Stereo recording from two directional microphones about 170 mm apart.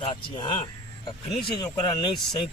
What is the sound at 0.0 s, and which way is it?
Speech, 30° left (ahead or behind).